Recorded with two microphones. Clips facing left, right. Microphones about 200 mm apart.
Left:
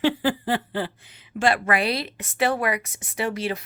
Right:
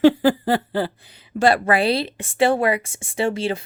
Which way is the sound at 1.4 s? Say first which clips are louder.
Right 5 dB; 35° right (ahead or behind).